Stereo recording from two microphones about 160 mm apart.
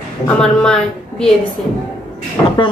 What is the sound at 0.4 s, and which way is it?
Speech, 5° left (ahead or behind).